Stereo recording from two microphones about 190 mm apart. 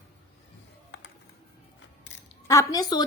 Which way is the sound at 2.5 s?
15° left (ahead or behind).